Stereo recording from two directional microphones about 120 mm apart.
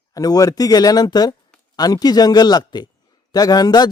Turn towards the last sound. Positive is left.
turn(degrees=35)  # may be behind; listen again after turning